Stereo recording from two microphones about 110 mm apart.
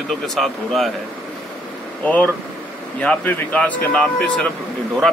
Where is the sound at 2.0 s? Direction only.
15° left (ahead or behind).